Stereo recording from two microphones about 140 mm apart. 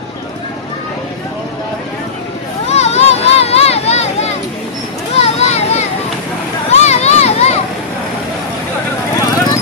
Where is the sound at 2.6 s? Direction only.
50° left (ahead or behind).